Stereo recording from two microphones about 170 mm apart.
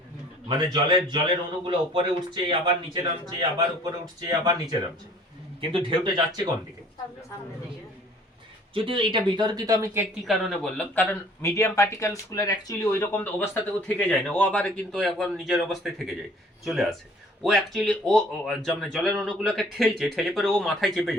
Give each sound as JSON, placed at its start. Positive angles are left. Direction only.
{"t": 0.4, "sound": "speech", "side_deg": -25}
{"t": 8.7, "sound": "speech", "side_deg": -30}
{"t": 10.2, "sound": "speech", "side_deg": 0}